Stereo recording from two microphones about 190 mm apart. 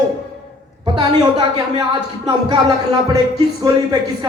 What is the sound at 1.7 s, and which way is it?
Speech, 25° right (ahead or behind).